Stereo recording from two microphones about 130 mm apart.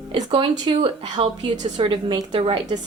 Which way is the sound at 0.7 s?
45° right (ahead or behind).